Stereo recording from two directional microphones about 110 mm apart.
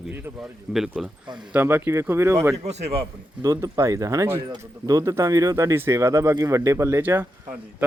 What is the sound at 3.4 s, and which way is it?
Speech, 35° right (ahead or behind).